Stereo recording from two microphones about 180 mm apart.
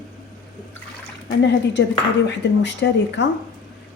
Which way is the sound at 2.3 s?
75° left (ahead or behind).